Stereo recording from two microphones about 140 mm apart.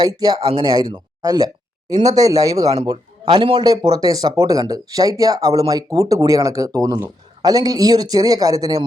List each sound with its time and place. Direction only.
0.0 s speech: 30° right (ahead or behind)